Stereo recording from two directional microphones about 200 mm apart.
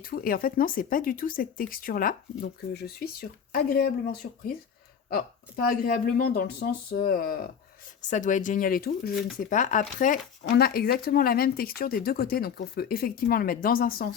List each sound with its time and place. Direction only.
0.0 s speech: 45° left (ahead or behind)